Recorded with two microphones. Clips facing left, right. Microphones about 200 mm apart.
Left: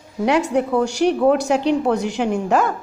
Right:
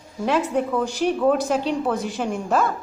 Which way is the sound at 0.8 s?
75° left (ahead or behind).